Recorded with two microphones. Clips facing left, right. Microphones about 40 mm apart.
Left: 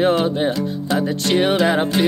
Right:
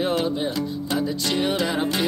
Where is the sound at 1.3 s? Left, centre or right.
Left.